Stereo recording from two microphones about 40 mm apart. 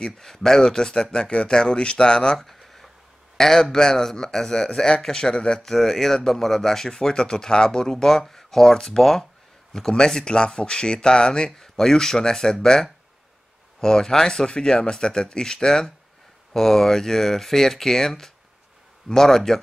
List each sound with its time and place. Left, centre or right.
0.0 s speech: centre
3.3 s speech: centre
5.6 s speech: centre